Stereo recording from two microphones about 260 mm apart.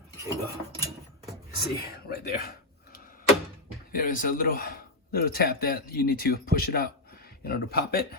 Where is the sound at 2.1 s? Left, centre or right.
Left.